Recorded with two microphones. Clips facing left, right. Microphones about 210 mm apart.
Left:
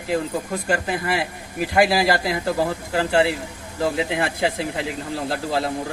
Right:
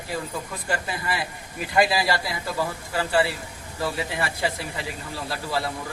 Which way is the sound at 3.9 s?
60° left (ahead or behind).